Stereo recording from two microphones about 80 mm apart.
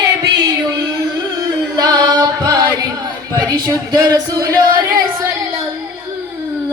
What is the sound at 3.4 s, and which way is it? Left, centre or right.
Speech, right.